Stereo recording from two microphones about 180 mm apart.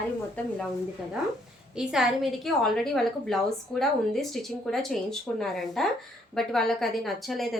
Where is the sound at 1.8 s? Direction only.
Centre (ahead or behind).